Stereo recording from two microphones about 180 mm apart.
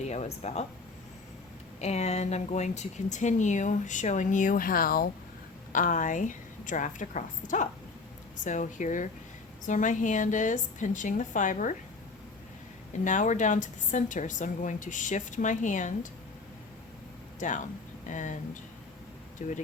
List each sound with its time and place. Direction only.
0.0 s speech: 40° left (ahead or behind)
1.8 s a woman's voice: 35° left (ahead or behind)
13.1 s a woman's voice: 45° left (ahead or behind)
17.4 s a woman's voice: 45° left (ahead or behind)
19.4 s a woman's voice: 45° left (ahead or behind)